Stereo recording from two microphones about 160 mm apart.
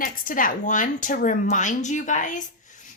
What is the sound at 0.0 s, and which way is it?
A woman's voice, 60° left (ahead or behind).